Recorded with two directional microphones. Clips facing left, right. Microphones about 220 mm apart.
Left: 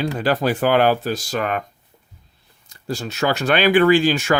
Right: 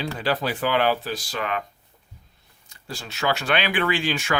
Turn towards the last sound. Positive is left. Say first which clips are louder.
# left 9 dB
turn(degrees=40)  # may be behind; listen again after turning